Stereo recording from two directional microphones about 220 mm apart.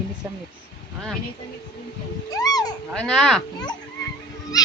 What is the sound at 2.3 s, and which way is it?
Speech, 15° left (ahead or behind).